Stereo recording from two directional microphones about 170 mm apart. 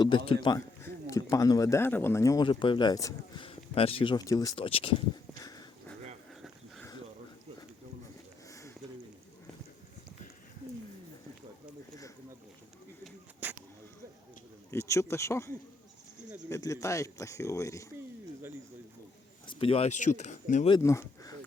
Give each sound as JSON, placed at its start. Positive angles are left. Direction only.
{"t": 0.3, "sound": "speech", "side_deg": 25}
{"t": 3.4, "sound": "speech", "side_deg": 35}
{"t": 4.5, "sound": "speech", "side_deg": 30}
{"t": 5.4, "sound": "sniff", "side_deg": 20}
{"t": 8.4, "sound": "sniff", "side_deg": 20}
{"t": 13.4, "sound": "a sound", "side_deg": -10}
{"t": 14.7, "sound": "speech", "side_deg": 15}
{"t": 19.5, "sound": "speech", "side_deg": 35}
{"t": 20.7, "sound": "speech", "side_deg": 20}